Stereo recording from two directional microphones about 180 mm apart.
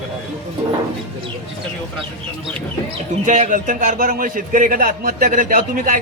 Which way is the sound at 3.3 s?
45° right (ahead or behind).